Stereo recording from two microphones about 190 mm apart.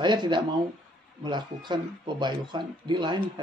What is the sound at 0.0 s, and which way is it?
Speech, 25° right (ahead or behind).